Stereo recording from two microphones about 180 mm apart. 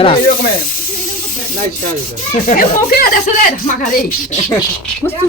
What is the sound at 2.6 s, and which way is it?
Speech, 55° left (ahead or behind).